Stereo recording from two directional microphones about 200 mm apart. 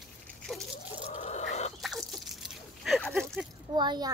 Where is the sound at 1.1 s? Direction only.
35° left (ahead or behind).